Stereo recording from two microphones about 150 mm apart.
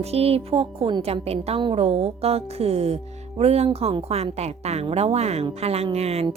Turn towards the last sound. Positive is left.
turn(degrees=-45)  # may be behind; listen again after turning